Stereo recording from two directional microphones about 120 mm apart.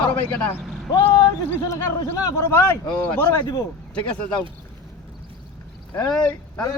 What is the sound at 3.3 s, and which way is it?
Speech, 35° left (ahead or behind).